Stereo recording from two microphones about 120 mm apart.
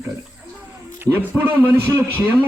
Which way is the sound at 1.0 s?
20° right (ahead or behind).